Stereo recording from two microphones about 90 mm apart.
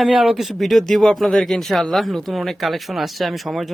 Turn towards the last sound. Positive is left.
turn(degrees=0)  # may be behind; listen again after turning